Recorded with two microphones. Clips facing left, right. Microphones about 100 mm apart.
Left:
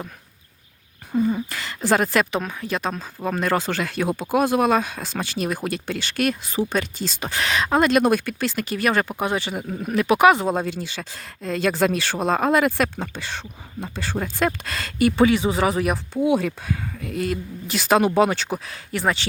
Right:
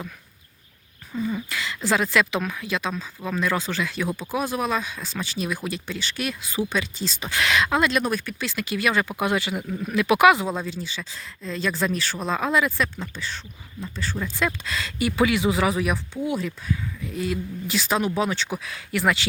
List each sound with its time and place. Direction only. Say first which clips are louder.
1.1 s speech: left 6 dB; 40° left (ahead or behind)
7.3 s speech: even; 35° left (ahead or behind)
9.2 s speech: even; 35° left (ahead or behind)
9.6 s speech: left 2 dB; 45° left (ahead or behind); by 12.1 s 65° left (ahead or behind)
12.2 s speech: left 4 dB; 50° left (ahead or behind)
15.1 s speech: even; 35° left (ahead or behind)
16.2 s speech: left 7 dB; 70° left (ahead or behind)
18.4 s speech: left 3 dB; 40° left (ahead or behind)